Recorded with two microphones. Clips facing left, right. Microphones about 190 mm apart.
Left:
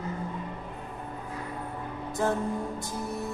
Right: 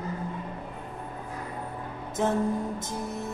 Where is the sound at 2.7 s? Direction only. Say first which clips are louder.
Even; 20° right (ahead or behind).